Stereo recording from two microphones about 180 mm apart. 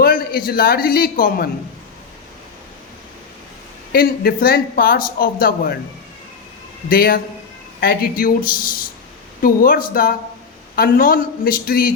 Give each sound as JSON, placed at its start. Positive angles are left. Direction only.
{"t": 0.0, "sound": "a man's voice", "side_deg": 55}
{"t": 3.9, "sound": "speech", "side_deg": 55}
{"t": 6.9, "sound": "speech", "side_deg": 55}